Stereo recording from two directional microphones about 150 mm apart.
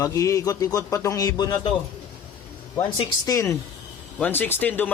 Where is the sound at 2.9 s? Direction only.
25° left (ahead or behind).